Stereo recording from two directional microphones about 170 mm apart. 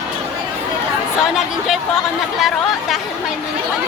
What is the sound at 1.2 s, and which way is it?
Speech, 5° right (ahead or behind).